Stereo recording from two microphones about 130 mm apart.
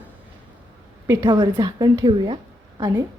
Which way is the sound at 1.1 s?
35° right (ahead or behind).